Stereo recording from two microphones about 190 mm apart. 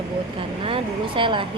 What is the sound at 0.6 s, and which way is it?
Speech, 30° right (ahead or behind).